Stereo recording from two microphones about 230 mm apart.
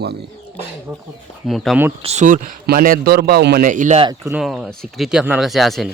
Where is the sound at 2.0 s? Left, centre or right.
Right.